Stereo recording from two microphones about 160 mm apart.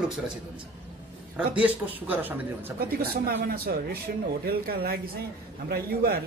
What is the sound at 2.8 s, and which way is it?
A man's voice, 70° right (ahead or behind).